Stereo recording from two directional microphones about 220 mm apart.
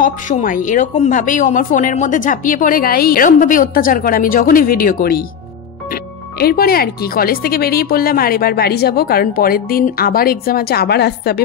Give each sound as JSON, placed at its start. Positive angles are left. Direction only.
{"t": 0.0, "sound": "a woman's voice", "side_deg": 35}
{"t": 6.4, "sound": "speech", "side_deg": 45}